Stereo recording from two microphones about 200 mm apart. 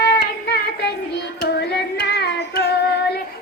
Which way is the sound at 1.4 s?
55° left (ahead or behind).